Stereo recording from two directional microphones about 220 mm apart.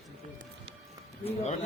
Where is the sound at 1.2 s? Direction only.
30° left (ahead or behind).